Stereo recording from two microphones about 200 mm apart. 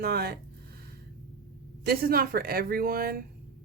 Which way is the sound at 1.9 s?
50° right (ahead or behind).